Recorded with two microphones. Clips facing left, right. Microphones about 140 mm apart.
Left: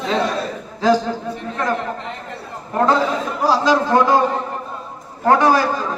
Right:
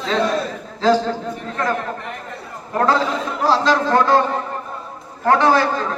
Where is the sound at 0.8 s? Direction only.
15° left (ahead or behind).